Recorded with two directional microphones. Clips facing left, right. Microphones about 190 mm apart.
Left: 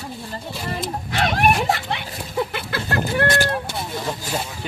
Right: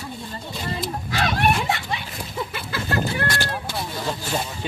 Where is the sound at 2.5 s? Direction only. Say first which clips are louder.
Left 1 dB; 65° left (ahead or behind).